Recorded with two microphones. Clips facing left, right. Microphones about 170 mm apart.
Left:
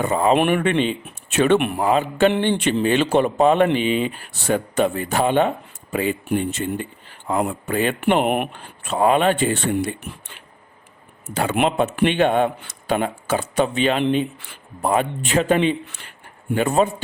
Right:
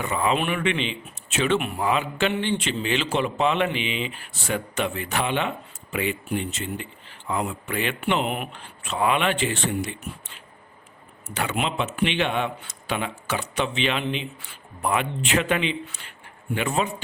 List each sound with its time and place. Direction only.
0.0 s speech: 40° left (ahead or behind)
0.3 s a man's voice: 50° left (ahead or behind)
1.4 s speech: 60° left (ahead or behind)
1.8 s a man's voice: 45° left (ahead or behind)
2.3 s a man's voice: 55° left (ahead or behind)
11.3 s a man's voice: 55° left (ahead or behind)
15.4 s a man's voice: 35° left (ahead or behind)